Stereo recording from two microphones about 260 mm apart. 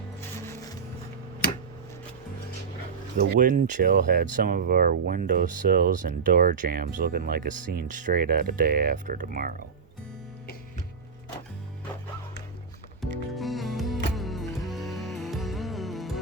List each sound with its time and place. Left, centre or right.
0.2 s music: centre
3.2 s speech: right
13.3 s music: centre